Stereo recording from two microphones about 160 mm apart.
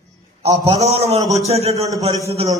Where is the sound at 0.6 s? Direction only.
40° right (ahead or behind).